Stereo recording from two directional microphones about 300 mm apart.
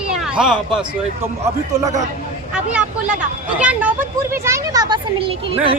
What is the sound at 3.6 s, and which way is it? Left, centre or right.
Speech, centre.